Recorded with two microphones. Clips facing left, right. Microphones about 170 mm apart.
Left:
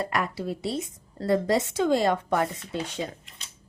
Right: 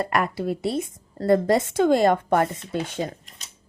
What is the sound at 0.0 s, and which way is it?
A woman's voice, 55° right (ahead or behind).